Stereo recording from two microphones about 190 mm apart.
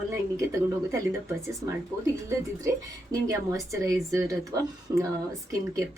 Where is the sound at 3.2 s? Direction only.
15° right (ahead or behind).